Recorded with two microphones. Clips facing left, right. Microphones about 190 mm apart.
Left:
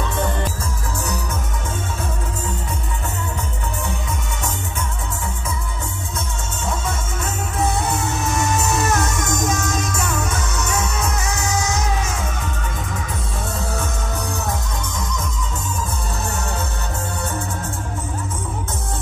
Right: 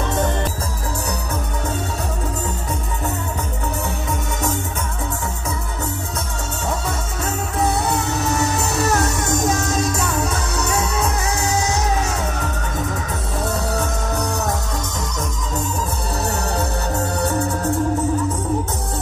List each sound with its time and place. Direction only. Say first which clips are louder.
8.2 s music: right 1 dB; 35° right (ahead or behind)
13.7 s music: right 4 dB; 40° right (ahead or behind)